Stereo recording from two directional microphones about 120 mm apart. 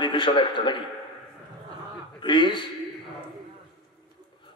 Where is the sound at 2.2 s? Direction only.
45° left (ahead or behind).